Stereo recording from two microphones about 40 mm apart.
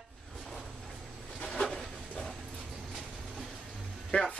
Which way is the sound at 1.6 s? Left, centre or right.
Centre.